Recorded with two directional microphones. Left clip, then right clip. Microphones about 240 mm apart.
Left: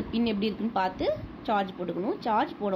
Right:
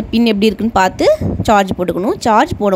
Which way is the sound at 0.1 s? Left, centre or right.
Right.